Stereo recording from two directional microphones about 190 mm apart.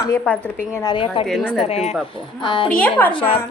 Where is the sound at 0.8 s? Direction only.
25° left (ahead or behind).